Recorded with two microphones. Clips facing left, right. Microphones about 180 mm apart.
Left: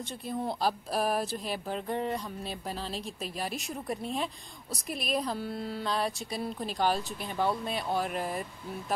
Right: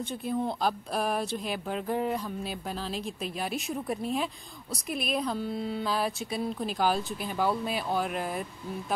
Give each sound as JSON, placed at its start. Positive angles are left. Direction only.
{"t": 0.3, "sound": "speech", "side_deg": 0}